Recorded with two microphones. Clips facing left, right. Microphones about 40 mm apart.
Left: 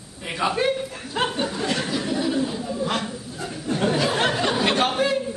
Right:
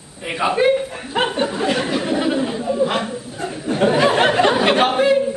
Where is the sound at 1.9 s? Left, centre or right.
Right.